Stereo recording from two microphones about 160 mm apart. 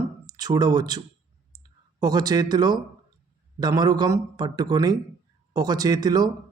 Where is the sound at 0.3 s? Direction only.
25° right (ahead or behind).